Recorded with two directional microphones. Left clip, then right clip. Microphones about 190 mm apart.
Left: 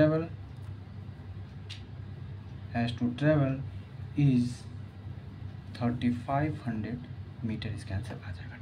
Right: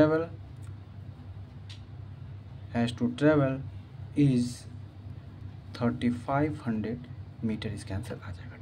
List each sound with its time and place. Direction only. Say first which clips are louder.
0.0 s speech: right 2 dB; 40° right (ahead or behind)
2.7 s speech: right 2 dB; 40° right (ahead or behind)
5.7 s speech: right 2 dB; 40° right (ahead or behind)